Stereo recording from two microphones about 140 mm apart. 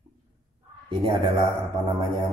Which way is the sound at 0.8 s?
35° right (ahead or behind).